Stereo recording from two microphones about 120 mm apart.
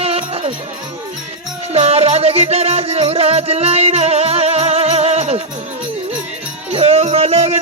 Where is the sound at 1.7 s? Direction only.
60° right (ahead or behind).